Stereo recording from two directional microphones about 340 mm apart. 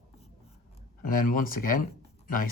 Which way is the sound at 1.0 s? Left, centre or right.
Left.